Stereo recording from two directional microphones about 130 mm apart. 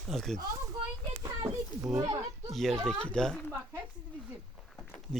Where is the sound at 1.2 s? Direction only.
30° right (ahead or behind).